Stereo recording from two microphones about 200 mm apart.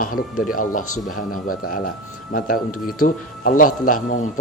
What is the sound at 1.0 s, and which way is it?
Speech, 40° left (ahead or behind).